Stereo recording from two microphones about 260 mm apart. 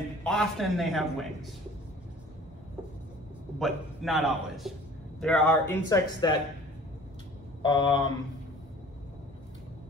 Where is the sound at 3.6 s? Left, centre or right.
Centre.